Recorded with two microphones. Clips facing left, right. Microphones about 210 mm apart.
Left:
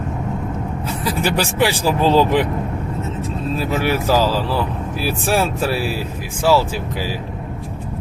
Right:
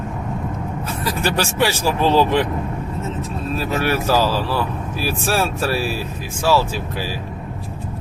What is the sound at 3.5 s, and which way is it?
Speech, 15° left (ahead or behind).